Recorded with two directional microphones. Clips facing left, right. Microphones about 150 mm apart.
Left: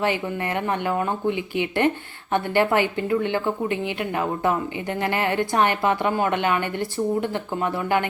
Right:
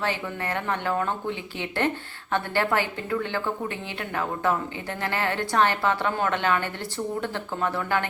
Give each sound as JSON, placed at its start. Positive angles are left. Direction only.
{"t": 0.0, "sound": "a woman's voice", "side_deg": 15}